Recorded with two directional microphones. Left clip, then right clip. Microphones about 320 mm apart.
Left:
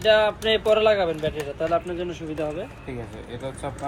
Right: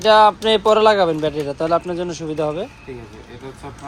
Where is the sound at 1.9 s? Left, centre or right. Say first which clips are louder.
Right 5 dB; right.